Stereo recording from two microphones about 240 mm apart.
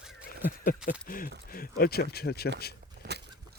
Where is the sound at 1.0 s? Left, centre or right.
Left.